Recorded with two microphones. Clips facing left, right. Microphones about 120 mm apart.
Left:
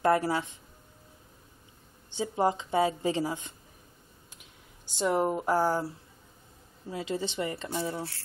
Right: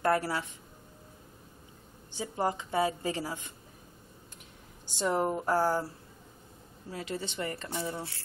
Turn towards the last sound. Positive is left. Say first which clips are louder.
# left 3 dB
turn(degrees=25)  # may be behind; listen again after turning